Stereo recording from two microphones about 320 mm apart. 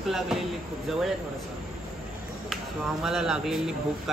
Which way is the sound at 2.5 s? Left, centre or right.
Centre.